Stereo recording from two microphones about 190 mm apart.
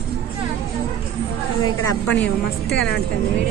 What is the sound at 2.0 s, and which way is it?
Speech, 10° left (ahead or behind).